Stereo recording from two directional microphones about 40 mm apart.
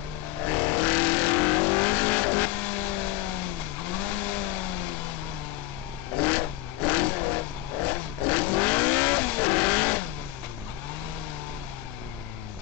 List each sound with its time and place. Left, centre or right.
0.5 s vehicle: left
6.2 s vehicle: left